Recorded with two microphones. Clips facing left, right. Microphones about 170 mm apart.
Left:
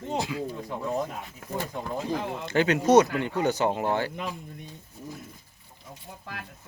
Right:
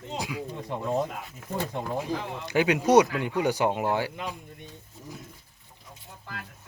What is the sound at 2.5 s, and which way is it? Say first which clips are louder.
Speech: even; 10° right (ahead or behind).